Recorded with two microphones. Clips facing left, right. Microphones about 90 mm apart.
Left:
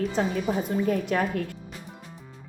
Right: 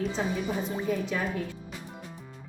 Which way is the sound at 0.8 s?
60° left (ahead or behind).